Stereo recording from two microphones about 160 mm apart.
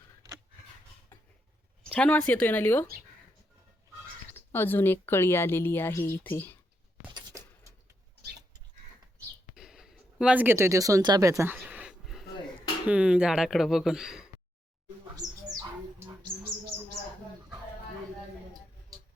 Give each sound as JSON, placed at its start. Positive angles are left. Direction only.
{"t": 1.9, "sound": "a woman's voice", "side_deg": 5}
{"t": 4.4, "sound": "a woman's voice", "side_deg": 15}
{"t": 7.1, "sound": "a sound", "side_deg": -25}
{"t": 9.6, "sound": "speech", "side_deg": -5}
{"t": 11.5, "sound": "a sound", "side_deg": -10}
{"t": 12.9, "sound": "speech", "side_deg": -10}
{"t": 15.2, "sound": "bird", "side_deg": -5}
{"t": 15.5, "sound": "bird", "side_deg": -25}